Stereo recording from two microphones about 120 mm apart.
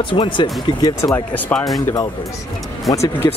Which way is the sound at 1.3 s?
15° left (ahead or behind).